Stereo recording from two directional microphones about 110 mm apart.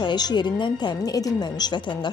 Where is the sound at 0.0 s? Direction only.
40° left (ahead or behind).